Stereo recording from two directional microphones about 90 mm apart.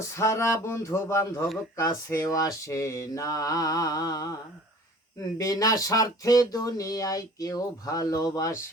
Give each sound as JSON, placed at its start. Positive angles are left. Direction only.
{"t": 0.0, "sound": "speech", "side_deg": 30}
{"t": 5.4, "sound": "speech", "side_deg": 40}